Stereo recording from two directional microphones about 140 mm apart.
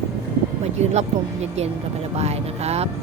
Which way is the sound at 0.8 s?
50° right (ahead or behind).